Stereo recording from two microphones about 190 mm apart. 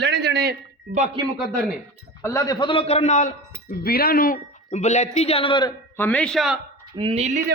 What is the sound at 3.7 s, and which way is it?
Speech, 55° left (ahead or behind).